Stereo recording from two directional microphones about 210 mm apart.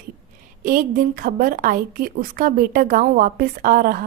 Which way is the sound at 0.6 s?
40° right (ahead or behind).